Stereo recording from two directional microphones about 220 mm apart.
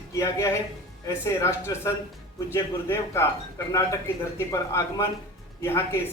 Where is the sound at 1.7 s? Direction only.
15° left (ahead or behind).